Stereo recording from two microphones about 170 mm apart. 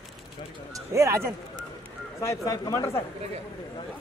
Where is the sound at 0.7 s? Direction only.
15° right (ahead or behind).